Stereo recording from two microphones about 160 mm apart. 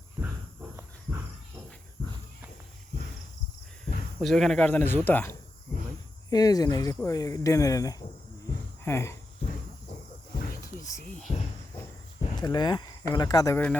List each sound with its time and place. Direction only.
4.2 s speech: centre (ahead or behind)
6.3 s speech: 25° left (ahead or behind)
12.3 s a sound: 25° left (ahead or behind)
13.1 s speech: 25° left (ahead or behind)